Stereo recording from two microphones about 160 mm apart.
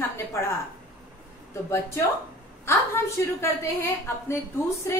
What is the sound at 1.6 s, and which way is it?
A woman's voice, 15° left (ahead or behind).